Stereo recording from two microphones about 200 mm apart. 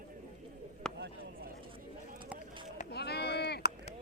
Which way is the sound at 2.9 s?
55° left (ahead or behind).